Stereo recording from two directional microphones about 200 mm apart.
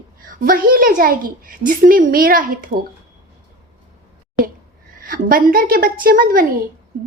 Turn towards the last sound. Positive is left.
turn(degrees=-45)  # may be behind; listen again after turning